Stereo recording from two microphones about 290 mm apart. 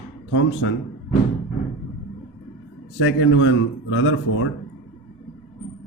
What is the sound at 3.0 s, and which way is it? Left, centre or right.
A man's voice, left.